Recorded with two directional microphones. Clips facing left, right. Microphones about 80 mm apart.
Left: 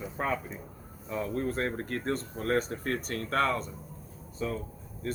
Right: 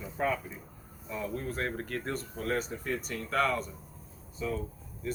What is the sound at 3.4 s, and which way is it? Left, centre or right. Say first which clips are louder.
Speech: even; left.